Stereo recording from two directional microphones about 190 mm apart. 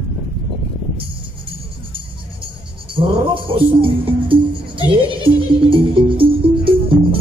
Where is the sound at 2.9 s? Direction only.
25° right (ahead or behind).